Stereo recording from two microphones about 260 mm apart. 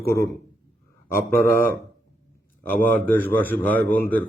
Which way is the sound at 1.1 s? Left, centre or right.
Left.